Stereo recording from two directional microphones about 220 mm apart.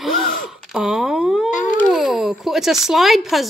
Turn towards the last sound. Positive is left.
turn(degrees=0)  # may be behind; listen again after turning